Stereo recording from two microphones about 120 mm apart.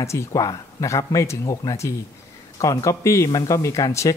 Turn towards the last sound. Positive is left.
turn(degrees=25)  # may be behind; listen again after turning